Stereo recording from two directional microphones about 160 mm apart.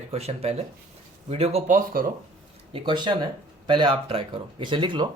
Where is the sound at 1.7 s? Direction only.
60° right (ahead or behind).